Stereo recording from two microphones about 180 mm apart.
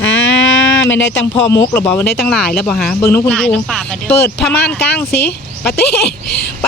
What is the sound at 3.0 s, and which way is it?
Speech, 15° left (ahead or behind).